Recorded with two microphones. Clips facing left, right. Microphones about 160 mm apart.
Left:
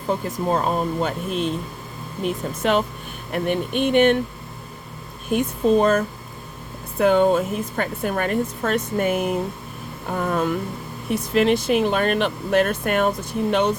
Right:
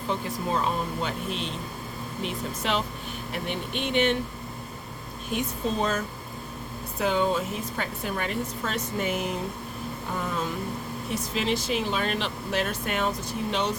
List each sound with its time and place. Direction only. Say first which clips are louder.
0.1 s speech: left 6 dB; 45° left (ahead or behind)
5.3 s speech: left 10 dB; 55° left (ahead or behind)